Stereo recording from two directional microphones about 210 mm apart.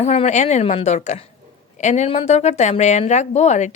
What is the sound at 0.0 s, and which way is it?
A woman's voice, 35° left (ahead or behind).